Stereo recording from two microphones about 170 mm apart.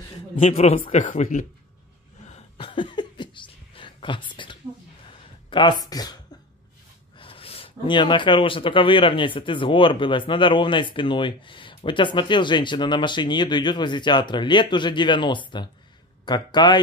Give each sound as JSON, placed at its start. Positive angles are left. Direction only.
{"t": 0.4, "sound": "speech", "side_deg": 40}
{"t": 2.2, "sound": "cough", "side_deg": 35}
{"t": 5.5, "sound": "speech", "side_deg": 30}
{"t": 7.2, "sound": "speech", "side_deg": 35}